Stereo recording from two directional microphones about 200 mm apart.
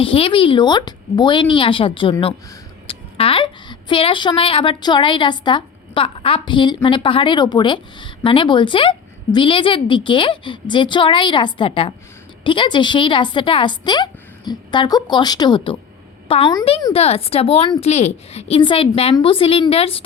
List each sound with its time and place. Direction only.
0.0 s a woman's voice: 25° left (ahead or behind)